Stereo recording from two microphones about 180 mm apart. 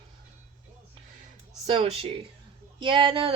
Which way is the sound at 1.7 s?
30° right (ahead or behind).